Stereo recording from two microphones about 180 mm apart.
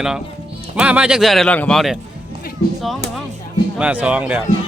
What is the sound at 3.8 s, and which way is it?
Speech, 5° right (ahead or behind).